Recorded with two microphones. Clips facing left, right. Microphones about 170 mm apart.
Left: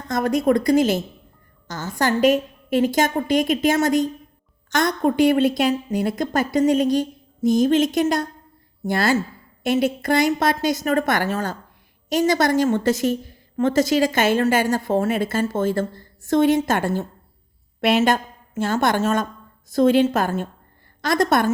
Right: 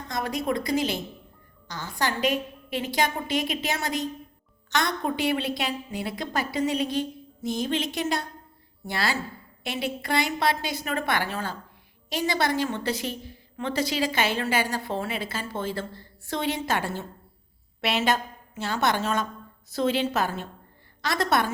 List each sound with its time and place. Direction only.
0.1 s a woman's voice: 45° left (ahead or behind)